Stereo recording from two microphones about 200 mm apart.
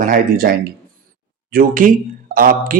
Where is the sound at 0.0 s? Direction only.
45° right (ahead or behind).